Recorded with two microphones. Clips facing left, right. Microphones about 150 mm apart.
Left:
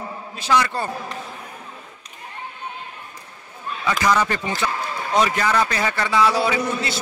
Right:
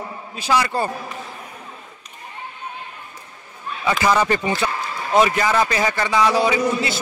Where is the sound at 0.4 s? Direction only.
10° right (ahead or behind).